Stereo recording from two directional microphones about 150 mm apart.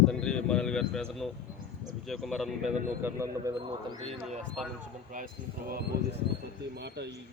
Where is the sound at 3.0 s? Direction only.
15° right (ahead or behind).